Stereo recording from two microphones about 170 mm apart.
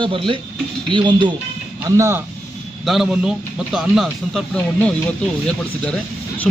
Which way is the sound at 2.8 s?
Centre (ahead or behind).